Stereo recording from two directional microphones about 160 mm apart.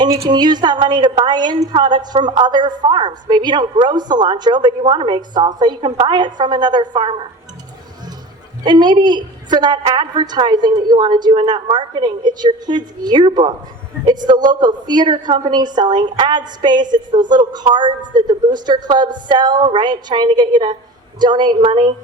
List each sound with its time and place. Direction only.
0.3 s a woman's voice: 25° right (ahead or behind)
8.6 s a woman's voice: 25° right (ahead or behind)